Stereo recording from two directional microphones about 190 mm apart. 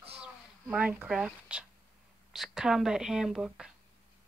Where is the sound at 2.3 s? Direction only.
Centre (ahead or behind).